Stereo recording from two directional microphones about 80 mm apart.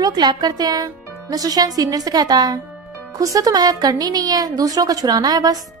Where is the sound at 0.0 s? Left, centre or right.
Right.